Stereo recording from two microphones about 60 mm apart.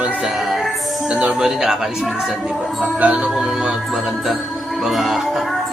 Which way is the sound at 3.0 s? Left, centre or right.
Centre.